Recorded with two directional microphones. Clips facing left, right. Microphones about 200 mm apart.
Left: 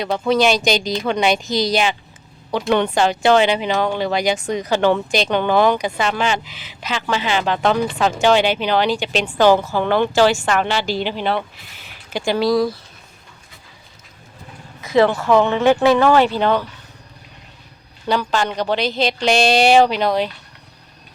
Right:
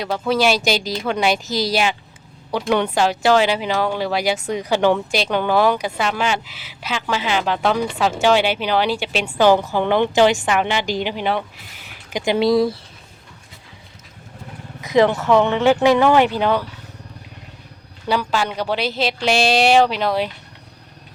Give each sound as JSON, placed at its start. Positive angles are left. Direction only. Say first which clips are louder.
{"t": 0.0, "sound": "a woman's voice", "louder": "left 2 dB", "side_deg": -5}
{"t": 14.8, "sound": "speech", "louder": "even", "side_deg": -15}
{"t": 18.1, "sound": "a woman's voice", "louder": "left 1 dB", "side_deg": -5}